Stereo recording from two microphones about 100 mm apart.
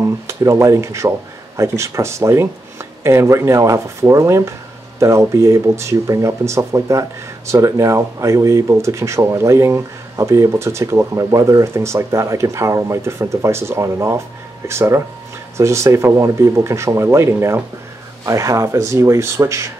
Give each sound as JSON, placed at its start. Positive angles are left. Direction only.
{"t": 0.0, "sound": "speech", "side_deg": -30}